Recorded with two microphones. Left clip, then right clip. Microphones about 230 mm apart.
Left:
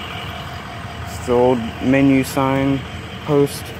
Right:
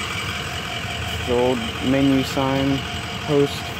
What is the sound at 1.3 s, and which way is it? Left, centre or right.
Speech, centre.